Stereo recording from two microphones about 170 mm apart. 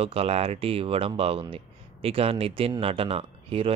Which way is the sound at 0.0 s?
35° right (ahead or behind).